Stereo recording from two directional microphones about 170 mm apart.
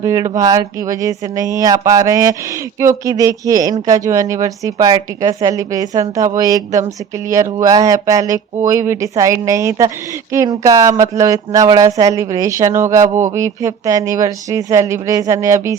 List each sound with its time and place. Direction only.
0.0 s a woman's voice: 20° right (ahead or behind)